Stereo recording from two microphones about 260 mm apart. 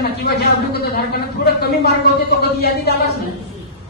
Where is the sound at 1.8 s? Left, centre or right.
Left.